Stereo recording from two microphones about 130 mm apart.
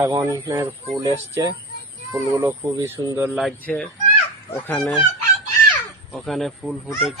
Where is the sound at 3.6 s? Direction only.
10° left (ahead or behind).